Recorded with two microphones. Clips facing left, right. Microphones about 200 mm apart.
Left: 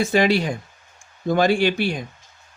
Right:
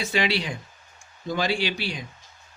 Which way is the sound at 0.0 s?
45° left (ahead or behind).